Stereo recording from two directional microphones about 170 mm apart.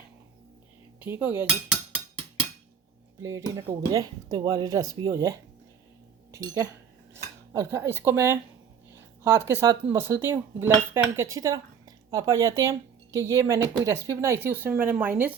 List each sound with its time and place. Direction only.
1.0 s cutlery: 10° right (ahead or behind)
3.9 s speech: 20° right (ahead or behind)
6.3 s cutlery: 20° right (ahead or behind)
9.2 s speech: 15° right (ahead or behind)